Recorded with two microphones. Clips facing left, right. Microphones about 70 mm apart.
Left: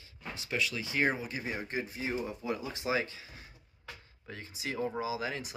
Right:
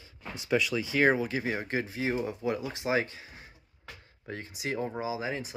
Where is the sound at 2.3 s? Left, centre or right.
Right.